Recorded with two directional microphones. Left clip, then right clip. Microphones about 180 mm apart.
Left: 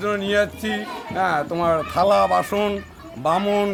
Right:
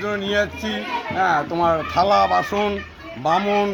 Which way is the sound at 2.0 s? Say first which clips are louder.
Even; 35° left (ahead or behind).